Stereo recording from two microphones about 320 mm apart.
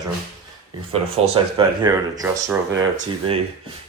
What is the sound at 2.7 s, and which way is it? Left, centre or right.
Speech, right.